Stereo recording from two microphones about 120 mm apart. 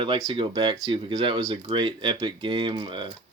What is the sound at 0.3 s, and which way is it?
Speech, 40° right (ahead or behind).